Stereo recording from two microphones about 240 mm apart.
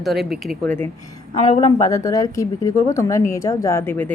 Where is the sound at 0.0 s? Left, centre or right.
Centre.